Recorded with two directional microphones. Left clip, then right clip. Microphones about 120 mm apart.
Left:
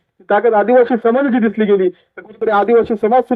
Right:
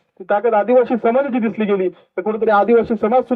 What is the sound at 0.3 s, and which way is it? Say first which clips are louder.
A man's voice: left 3 dB; 30° left (ahead or behind).